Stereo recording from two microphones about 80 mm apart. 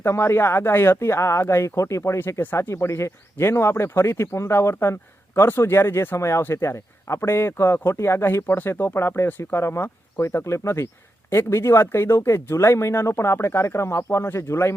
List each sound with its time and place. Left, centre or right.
0.0 s speech: left